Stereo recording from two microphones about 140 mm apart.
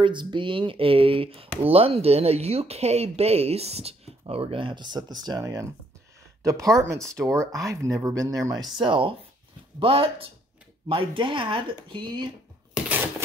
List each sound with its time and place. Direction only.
0.0 s speech: 35° right (ahead or behind)
7.1 s speech: 5° left (ahead or behind)
7.3 s speech: 25° right (ahead or behind)
8.7 s speech: 35° right (ahead or behind)
12.7 s a sound: 10° right (ahead or behind)